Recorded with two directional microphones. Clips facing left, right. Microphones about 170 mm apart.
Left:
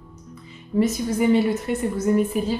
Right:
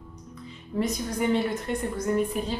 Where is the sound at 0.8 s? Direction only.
5° left (ahead or behind).